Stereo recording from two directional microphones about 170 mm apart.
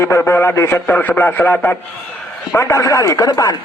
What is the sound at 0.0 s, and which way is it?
A man's voice, 15° left (ahead or behind).